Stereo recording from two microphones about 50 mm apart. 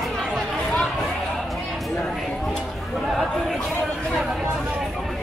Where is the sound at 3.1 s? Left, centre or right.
Centre.